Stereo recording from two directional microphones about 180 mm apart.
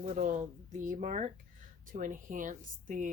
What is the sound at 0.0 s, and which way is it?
A woman's voice, 45° right (ahead or behind).